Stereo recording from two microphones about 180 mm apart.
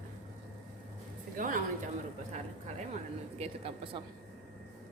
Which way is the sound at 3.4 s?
35° right (ahead or behind).